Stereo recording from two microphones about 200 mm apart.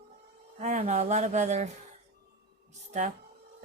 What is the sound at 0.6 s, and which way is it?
Speech, 35° right (ahead or behind).